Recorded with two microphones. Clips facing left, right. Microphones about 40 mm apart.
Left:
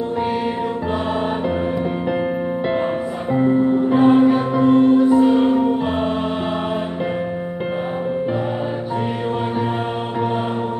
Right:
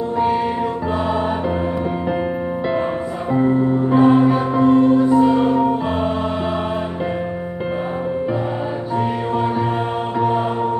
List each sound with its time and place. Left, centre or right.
3.3 s music: centre
3.9 s music: centre